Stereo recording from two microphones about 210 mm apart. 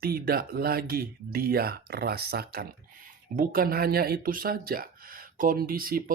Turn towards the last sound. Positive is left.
turn(degrees=-45)  # may be behind; listen again after turning